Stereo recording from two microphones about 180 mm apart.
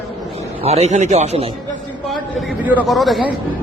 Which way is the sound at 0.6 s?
35° right (ahead or behind).